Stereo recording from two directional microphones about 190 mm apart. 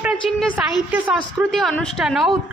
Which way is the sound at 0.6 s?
5° right (ahead or behind).